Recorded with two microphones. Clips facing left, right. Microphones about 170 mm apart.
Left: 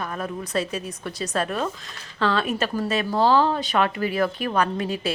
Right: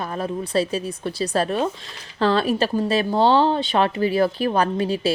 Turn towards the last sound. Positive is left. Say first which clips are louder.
# right 4 dB
turn(degrees=-30)  # may be behind; listen again after turning